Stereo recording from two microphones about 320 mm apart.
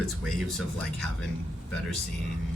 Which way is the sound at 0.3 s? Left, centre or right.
Centre.